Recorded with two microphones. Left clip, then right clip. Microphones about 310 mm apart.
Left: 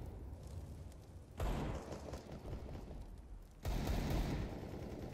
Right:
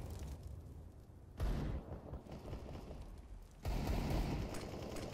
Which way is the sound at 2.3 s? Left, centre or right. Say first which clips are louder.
Even; centre.